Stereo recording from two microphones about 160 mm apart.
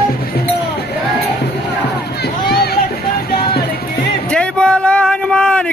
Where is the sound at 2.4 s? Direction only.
75° left (ahead or behind).